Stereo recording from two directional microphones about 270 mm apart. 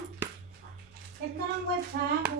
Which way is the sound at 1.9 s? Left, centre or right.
Right.